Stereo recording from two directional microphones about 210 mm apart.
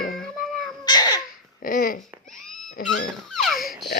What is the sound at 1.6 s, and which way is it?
Speech, 45° left (ahead or behind).